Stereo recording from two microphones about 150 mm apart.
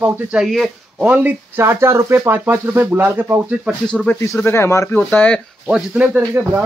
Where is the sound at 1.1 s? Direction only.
15° right (ahead or behind).